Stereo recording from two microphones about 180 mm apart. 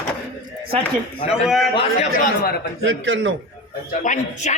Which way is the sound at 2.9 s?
90° right.